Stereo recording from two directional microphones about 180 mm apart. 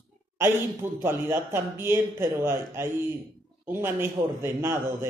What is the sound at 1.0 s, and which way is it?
A man's voice, 15° right (ahead or behind).